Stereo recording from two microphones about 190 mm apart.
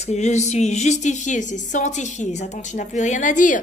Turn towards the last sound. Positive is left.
turn(degrees=45)  # may be behind; listen again after turning